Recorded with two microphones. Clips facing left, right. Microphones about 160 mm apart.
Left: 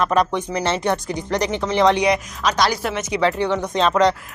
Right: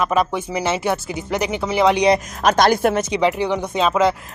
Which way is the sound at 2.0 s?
30° right (ahead or behind).